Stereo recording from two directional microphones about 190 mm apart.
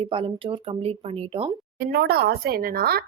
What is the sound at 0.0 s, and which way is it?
Speech, 30° right (ahead or behind).